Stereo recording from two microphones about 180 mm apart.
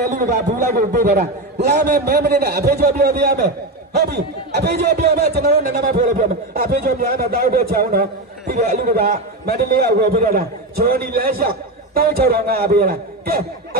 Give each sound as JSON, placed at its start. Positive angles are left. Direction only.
{"t": 0.1, "sound": "a man's voice", "side_deg": -60}